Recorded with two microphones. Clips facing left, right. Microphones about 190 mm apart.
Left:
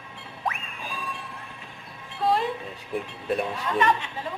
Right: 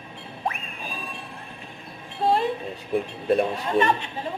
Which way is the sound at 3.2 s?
30° right (ahead or behind).